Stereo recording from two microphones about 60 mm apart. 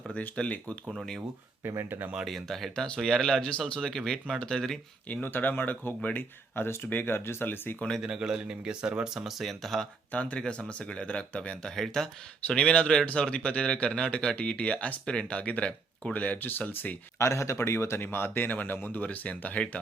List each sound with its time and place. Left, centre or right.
0.1 s speech: left
1.6 s speech: right
2.2 s speech: centre
2.8 s speech: centre
5.0 s speech: left
6.6 s speech: left
8.0 s speech: centre
9.4 s speech: centre
10.1 s speech: left
17.2 s speech: left